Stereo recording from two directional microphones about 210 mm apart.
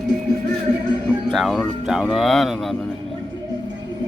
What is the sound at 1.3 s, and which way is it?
Speech, centre (ahead or behind).